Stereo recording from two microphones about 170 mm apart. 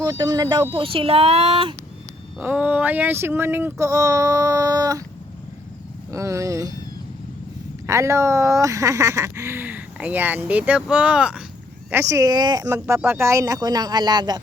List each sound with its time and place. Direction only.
0.0 s speech: 20° right (ahead or behind)
2.4 s speech: 10° right (ahead or behind)
6.1 s speech: 20° right (ahead or behind)
7.9 s speech: 15° right (ahead or behind)
11.9 s speech: 15° right (ahead or behind)